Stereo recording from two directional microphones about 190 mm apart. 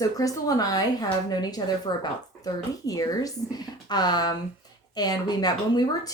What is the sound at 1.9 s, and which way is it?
A woman's voice, 25° left (ahead or behind).